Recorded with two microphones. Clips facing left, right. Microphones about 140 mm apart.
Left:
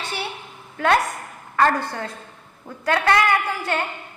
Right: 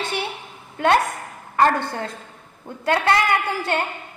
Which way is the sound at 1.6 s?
25° right (ahead or behind).